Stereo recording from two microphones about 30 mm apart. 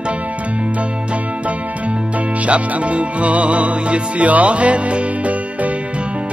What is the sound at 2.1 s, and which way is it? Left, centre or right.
Music, right.